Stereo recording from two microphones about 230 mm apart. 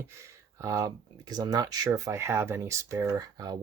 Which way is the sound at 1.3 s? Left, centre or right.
Centre.